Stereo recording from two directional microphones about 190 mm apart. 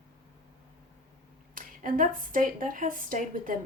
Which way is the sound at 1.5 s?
45° right (ahead or behind).